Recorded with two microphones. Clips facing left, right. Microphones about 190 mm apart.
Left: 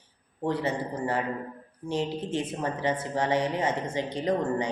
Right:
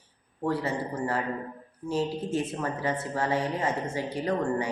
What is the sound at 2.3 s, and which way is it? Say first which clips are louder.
Speech: even; 20° left (ahead or behind).